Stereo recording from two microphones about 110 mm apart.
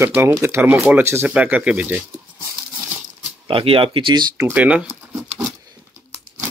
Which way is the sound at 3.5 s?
55° right (ahead or behind).